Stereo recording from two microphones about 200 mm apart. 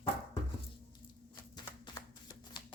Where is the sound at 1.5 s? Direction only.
20° left (ahead or behind).